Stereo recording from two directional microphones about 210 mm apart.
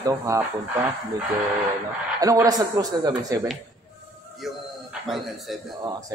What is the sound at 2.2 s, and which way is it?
Speech, 15° right (ahead or behind).